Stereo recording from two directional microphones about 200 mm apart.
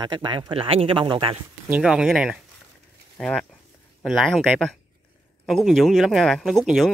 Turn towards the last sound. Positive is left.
turn(degrees=0)  # may be behind; listen again after turning